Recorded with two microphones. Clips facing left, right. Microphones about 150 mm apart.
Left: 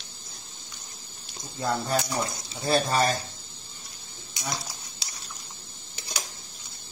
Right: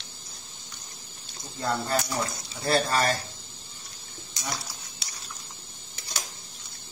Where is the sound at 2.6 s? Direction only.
20° left (ahead or behind).